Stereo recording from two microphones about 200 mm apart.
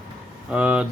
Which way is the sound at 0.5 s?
5° right (ahead or behind).